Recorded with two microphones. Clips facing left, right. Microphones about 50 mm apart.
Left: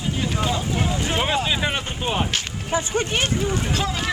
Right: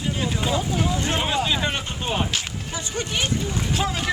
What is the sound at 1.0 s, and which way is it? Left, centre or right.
Speech, centre.